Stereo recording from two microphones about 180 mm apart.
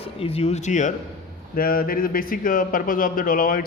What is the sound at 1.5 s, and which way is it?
A man's voice, 55° left (ahead or behind).